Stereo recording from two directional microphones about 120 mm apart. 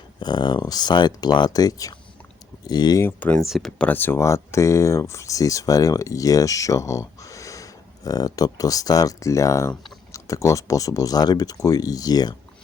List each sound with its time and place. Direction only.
0.2 s speech: 35° left (ahead or behind)
3.0 s speech: 15° left (ahead or behind)
3.4 s speech: 5° right (ahead or behind)
3.8 s speech: 15° left (ahead or behind); by 12.4 s 35° left (ahead or behind)